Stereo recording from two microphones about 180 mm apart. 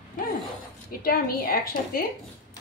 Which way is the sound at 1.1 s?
55° left (ahead or behind).